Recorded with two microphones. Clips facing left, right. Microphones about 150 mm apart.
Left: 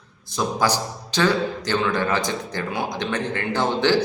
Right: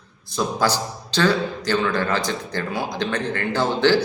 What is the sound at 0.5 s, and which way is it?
A man's voice, 15° left (ahead or behind).